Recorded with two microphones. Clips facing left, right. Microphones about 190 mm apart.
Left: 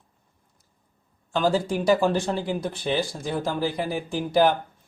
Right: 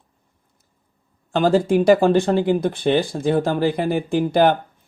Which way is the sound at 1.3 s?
55° right (ahead or behind).